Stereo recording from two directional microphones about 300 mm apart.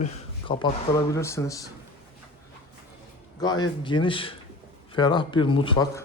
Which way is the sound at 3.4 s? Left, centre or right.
Centre.